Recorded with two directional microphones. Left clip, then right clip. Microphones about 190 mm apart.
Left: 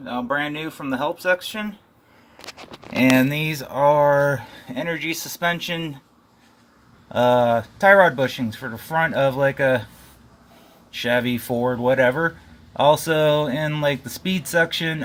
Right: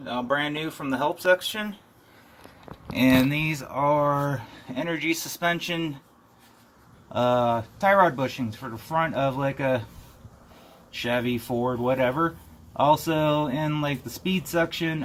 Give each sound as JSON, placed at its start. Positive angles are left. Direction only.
{"t": 0.0, "sound": "speech", "side_deg": 50}
{"t": 2.9, "sound": "speech", "side_deg": 55}
{"t": 7.1, "sound": "speech", "side_deg": 55}
{"t": 10.9, "sound": "speech", "side_deg": 55}